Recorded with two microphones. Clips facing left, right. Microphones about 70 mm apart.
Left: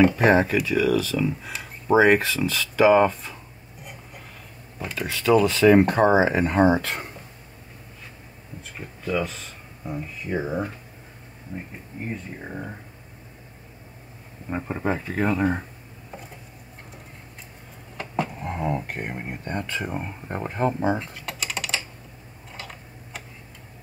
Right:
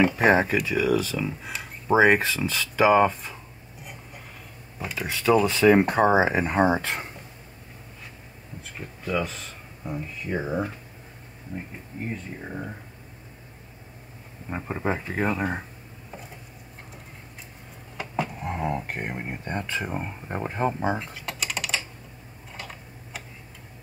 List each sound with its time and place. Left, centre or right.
0.2 s speech: centre
4.7 s speech: centre
5.0 s speech: centre
8.7 s speech: centre
12.1 s speech: centre
14.5 s speech: centre
14.9 s speech: centre
17.9 s a sound: centre
18.4 s a sound: centre
18.9 s speech: centre
19.9 s speech: centre
21.0 s typing: centre
22.5 s tick-tock: centre